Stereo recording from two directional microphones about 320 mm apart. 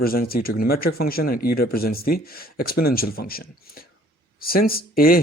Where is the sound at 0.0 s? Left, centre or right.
Left.